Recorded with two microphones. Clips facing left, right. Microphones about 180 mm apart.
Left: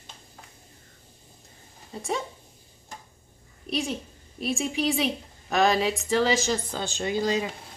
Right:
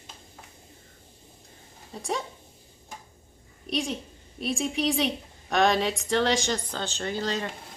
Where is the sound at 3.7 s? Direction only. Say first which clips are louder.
Even; centre (ahead or behind).